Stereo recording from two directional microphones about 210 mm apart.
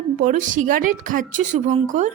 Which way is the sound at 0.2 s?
40° right (ahead or behind).